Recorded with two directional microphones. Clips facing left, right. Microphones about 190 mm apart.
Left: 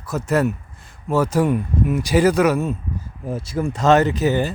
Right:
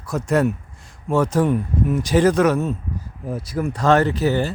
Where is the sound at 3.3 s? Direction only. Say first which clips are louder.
Left 1 dB; 25° left (ahead or behind).